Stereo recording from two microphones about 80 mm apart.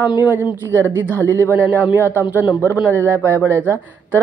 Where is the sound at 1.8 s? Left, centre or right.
Right.